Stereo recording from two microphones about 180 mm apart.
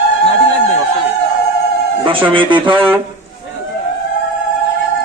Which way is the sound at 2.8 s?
10° right (ahead or behind).